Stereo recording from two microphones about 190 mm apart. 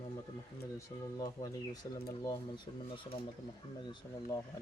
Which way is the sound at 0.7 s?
20° left (ahead or behind).